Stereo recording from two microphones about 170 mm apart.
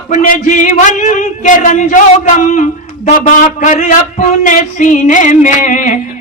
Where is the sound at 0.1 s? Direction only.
50° left (ahead or behind).